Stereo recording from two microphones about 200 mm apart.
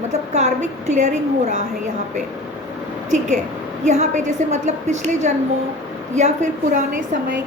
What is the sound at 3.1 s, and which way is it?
A woman's voice, 35° right (ahead or behind).